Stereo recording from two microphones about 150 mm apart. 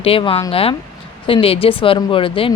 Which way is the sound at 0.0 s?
40° left (ahead or behind).